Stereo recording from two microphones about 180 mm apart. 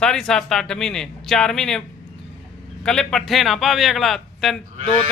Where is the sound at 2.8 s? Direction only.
5° left (ahead or behind).